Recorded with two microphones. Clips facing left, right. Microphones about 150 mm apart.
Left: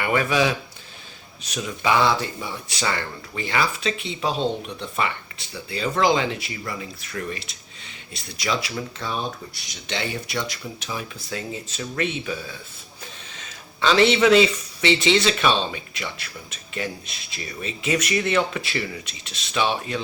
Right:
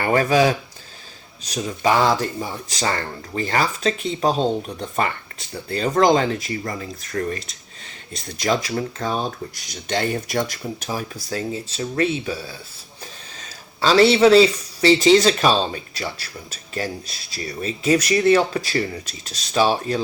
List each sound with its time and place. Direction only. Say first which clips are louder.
0.0 s speech: right 4 dB; 40° right (ahead or behind)